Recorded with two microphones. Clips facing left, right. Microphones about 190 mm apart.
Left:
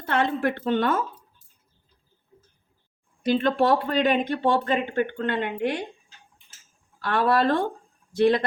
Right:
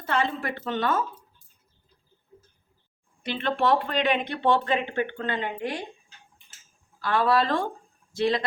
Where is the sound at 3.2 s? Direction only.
40° left (ahead or behind); by 5.7 s 60° left (ahead or behind).